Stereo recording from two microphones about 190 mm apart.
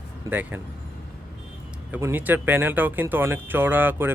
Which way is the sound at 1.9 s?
10° right (ahead or behind).